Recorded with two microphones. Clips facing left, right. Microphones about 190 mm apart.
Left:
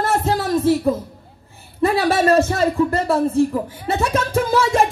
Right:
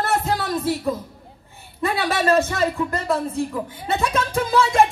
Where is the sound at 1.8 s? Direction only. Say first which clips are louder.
Left 4 dB; 35° left (ahead or behind).